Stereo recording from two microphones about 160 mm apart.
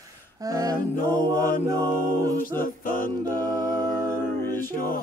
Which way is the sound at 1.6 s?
20° right (ahead or behind).